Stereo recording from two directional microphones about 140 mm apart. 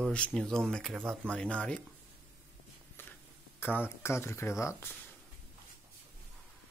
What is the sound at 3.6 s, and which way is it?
Speech, 15° left (ahead or behind).